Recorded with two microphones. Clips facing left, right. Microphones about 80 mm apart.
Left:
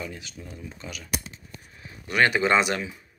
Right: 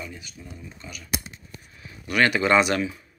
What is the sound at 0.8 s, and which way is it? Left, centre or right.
Speech, left.